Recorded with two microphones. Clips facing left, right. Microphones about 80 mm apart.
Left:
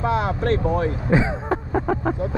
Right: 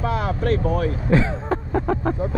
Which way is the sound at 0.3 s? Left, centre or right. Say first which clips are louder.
Even; left.